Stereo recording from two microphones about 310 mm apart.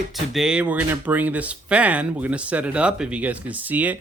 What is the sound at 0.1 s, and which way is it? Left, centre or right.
Speech, centre.